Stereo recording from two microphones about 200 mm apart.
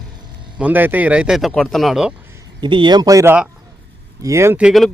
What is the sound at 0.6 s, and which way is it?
Speech, 10° right (ahead or behind).